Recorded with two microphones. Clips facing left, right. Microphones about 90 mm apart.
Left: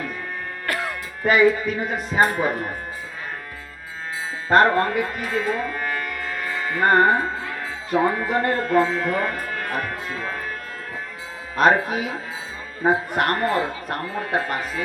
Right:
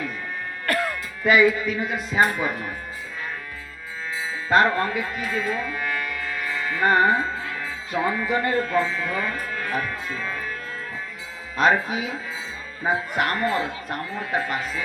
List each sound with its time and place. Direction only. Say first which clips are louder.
0.7 s music: right 3 dB; 20° left (ahead or behind)
1.2 s speech: left 1 dB; 40° left (ahead or behind)
4.4 s speech: left 3 dB; 40° left (ahead or behind)
11.5 s speech: left 2 dB; 50° left (ahead or behind)